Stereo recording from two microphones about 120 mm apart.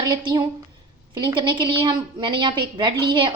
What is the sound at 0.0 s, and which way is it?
A woman's voice, 35° right (ahead or behind).